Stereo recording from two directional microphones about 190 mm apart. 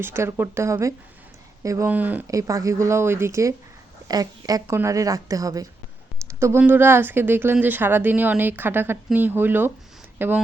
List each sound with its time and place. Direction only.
0.0 s a woman's voice: 10° right (ahead or behind)